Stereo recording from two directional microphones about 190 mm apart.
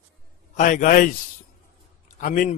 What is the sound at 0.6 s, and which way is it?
Speech, 45° left (ahead or behind).